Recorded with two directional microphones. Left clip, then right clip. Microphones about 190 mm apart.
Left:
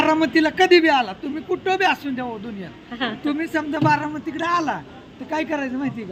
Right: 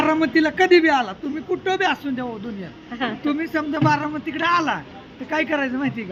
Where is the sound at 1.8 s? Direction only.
10° right (ahead or behind).